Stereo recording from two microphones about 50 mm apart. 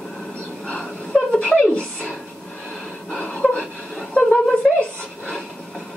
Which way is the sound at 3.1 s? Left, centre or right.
Centre.